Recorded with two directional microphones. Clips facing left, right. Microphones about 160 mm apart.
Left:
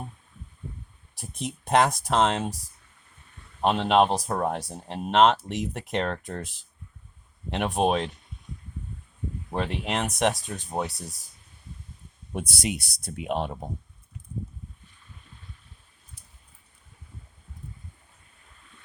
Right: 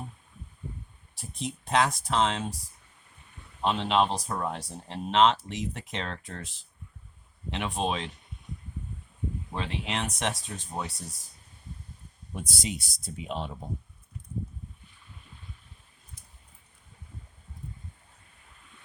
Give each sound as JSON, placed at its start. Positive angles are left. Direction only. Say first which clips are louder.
{"t": 1.6, "sound": "speech", "louder": "left 4 dB", "side_deg": 45}
{"t": 3.6, "sound": "speech", "louder": "left 5 dB", "side_deg": 55}
{"t": 4.3, "sound": "speech", "louder": "left 5 dB", "side_deg": 45}
{"t": 5.5, "sound": "speech", "louder": "left 5 dB", "side_deg": 60}
{"t": 7.5, "sound": "speech", "louder": "left 6 dB", "side_deg": 55}
{"t": 9.6, "sound": "speech", "louder": "left 5 dB", "side_deg": 55}
{"t": 12.3, "sound": "speech", "louder": "left 5 dB", "side_deg": 70}